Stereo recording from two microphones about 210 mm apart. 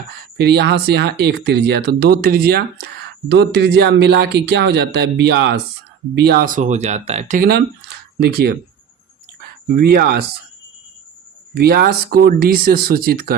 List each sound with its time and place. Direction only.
0.3 s speech: 55° right (ahead or behind)
9.6 s speech: 50° right (ahead or behind)
11.5 s speech: 50° right (ahead or behind)